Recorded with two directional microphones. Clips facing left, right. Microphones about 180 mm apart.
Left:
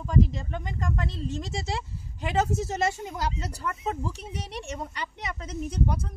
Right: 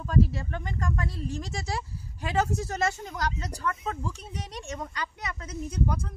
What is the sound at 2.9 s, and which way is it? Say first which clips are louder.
Speech: left 1 dB; 10° left (ahead or behind).